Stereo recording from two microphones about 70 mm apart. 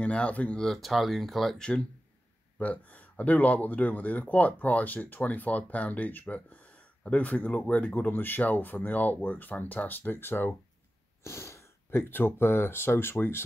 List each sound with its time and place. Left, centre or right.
0.0 s speech: centre
0.6 s speech: centre
2.6 s speech: left
11.2 s speech: left